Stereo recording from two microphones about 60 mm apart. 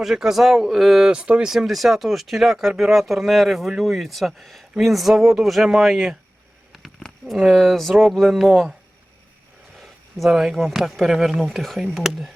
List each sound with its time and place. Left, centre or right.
0.0 s speech: centre
1.1 s speech: centre
1.5 s speech: centre
7.0 s a sound: centre
7.5 s speech: centre
9.7 s speech: centre
11.4 s speech: centre